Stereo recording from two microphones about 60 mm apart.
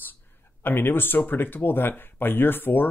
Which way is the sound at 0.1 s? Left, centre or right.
Left.